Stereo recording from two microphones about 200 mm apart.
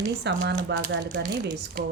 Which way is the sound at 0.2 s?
60° right (ahead or behind).